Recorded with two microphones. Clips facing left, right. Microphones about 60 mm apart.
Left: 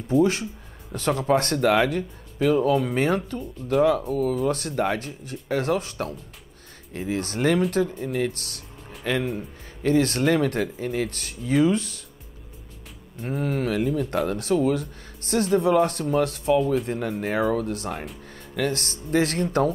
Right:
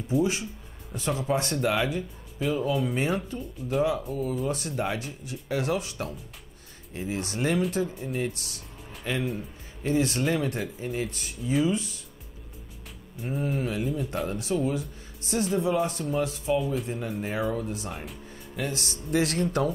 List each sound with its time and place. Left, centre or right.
0.1 s speech: left
13.2 s speech: left